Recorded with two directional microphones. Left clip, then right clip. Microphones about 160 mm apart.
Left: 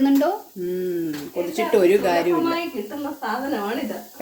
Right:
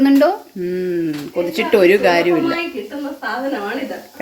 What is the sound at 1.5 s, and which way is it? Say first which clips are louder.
Speech: right 5 dB; 20° right (ahead or behind).